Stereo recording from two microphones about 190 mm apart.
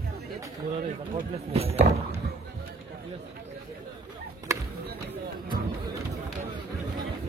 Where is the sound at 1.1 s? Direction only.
30° right (ahead or behind).